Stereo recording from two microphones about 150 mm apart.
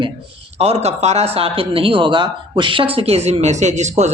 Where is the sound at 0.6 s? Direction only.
45° right (ahead or behind).